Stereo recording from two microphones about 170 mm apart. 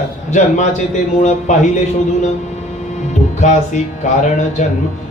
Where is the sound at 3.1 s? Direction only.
45° left (ahead or behind).